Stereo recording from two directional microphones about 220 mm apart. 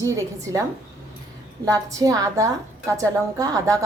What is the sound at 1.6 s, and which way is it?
A woman's voice, 15° right (ahead or behind).